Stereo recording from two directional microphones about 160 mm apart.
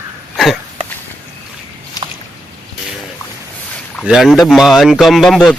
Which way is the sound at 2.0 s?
20° left (ahead or behind).